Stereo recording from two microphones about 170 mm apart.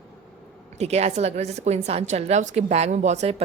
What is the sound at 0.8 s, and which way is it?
A woman's voice, 40° right (ahead or behind).